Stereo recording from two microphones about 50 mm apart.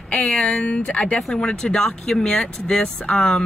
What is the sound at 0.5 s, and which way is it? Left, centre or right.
Speech, left.